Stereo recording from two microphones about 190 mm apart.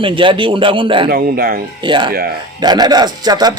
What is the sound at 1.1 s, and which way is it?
Speech, 55° right (ahead or behind).